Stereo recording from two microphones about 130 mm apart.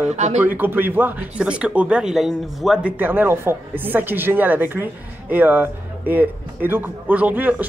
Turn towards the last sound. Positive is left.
turn(degrees=-10)  # may be behind; listen again after turning